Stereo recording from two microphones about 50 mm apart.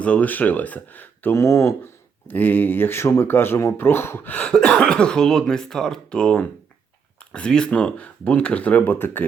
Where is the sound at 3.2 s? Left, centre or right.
Left.